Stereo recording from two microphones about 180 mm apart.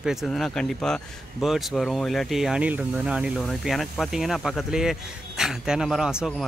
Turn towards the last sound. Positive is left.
turn(degrees=0)  # may be behind; listen again after turning